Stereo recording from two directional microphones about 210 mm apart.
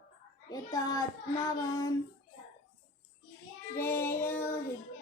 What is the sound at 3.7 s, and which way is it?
Speech, 10° left (ahead or behind).